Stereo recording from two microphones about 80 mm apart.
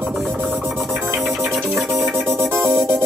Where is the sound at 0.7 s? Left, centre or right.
Centre.